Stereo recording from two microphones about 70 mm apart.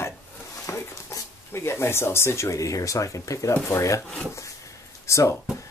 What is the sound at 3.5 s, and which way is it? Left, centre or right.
Speech, left.